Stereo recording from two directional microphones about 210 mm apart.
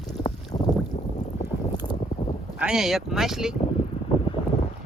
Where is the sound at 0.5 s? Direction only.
25° left (ahead or behind).